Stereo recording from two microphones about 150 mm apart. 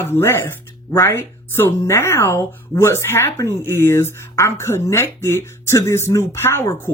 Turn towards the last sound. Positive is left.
turn(degrees=20)  # may be behind; listen again after turning